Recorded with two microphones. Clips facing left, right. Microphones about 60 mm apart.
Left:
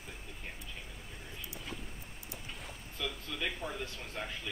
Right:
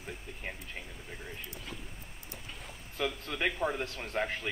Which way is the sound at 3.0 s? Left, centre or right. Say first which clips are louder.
Right 6 dB; right.